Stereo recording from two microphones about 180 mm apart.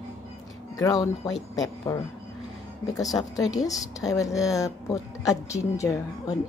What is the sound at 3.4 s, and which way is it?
Speech, 20° left (ahead or behind).